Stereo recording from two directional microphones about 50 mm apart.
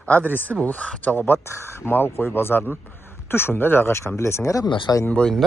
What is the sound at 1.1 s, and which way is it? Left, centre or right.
Speech, left.